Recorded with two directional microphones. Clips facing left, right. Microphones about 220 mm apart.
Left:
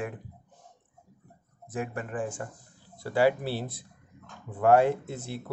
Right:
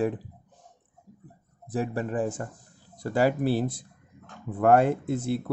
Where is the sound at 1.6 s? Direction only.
35° right (ahead or behind).